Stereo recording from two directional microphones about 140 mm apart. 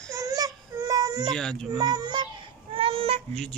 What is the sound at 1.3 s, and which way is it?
Speech, 5° left (ahead or behind).